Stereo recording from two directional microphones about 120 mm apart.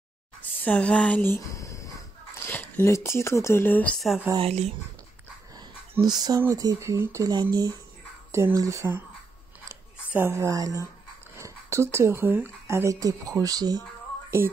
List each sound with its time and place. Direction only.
0.6 s speech: 10° left (ahead or behind)
3.9 s speech: centre (ahead or behind)
4.4 s speech: 60° right (ahead or behind)
5.6 s a sound: 35° right (ahead or behind)
6.5 s speech: 30° right (ahead or behind)
8.3 s speech: 25° right (ahead or behind)
9.7 s a sound: 20° right (ahead or behind)
11.3 s speech: 25° right (ahead or behind)